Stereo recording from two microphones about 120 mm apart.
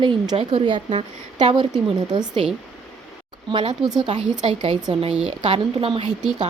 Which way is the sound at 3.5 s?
45° right (ahead or behind).